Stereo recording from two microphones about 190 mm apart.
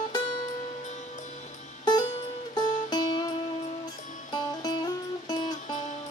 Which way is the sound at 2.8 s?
20° left (ahead or behind).